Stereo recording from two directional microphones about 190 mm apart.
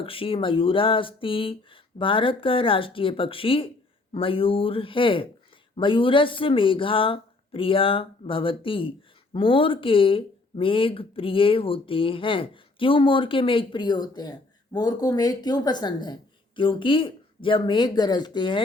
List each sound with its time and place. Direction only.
0.0 s speech: 30° left (ahead or behind)